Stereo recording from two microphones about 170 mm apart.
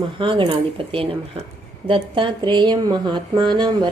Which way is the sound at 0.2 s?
30° right (ahead or behind).